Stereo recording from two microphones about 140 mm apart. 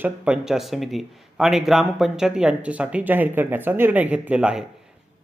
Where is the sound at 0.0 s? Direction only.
5° right (ahead or behind).